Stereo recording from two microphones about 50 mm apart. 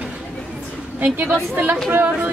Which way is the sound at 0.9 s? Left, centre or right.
Right.